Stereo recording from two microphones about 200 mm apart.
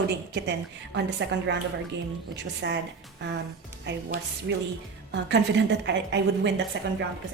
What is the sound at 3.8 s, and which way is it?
Speech, 60° right (ahead or behind).